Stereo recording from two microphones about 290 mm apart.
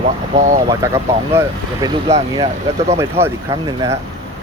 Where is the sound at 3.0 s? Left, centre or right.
Centre.